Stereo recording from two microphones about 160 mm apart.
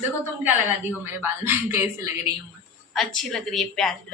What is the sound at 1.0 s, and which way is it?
A woman's voice, 15° right (ahead or behind).